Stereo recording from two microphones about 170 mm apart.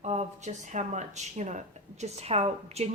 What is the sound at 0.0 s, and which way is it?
A woman's voice, 40° right (ahead or behind).